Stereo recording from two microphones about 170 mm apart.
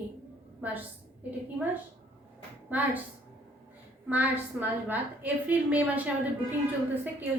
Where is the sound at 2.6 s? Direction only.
10° right (ahead or behind).